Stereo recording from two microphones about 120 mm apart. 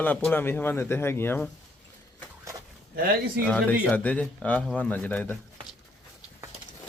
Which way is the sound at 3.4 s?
10° left (ahead or behind).